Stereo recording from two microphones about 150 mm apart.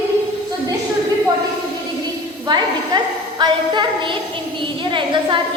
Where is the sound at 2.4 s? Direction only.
30° right (ahead or behind).